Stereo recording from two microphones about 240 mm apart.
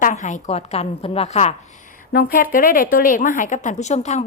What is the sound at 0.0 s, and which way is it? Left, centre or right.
A woman's voice, left.